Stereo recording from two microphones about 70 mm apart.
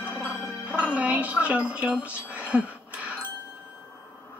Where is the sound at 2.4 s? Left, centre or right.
Centre.